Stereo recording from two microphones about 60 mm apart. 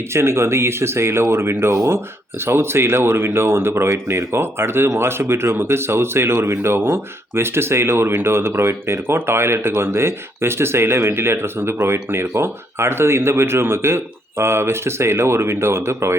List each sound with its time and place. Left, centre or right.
0.1 s speech: right